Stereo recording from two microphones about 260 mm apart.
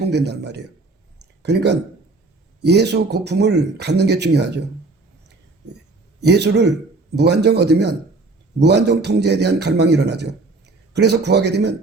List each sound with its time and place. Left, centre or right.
0.1 s speech: right
1.2 s a sound: right
2.6 s speech: right
6.2 s speech: right